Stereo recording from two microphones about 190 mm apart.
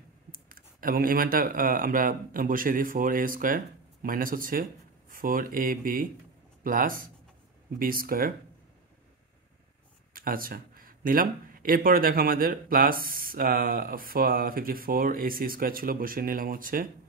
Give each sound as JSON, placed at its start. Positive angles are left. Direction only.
{"t": 0.3, "sound": "speech", "side_deg": -50}
{"t": 10.1, "sound": "speech", "side_deg": -50}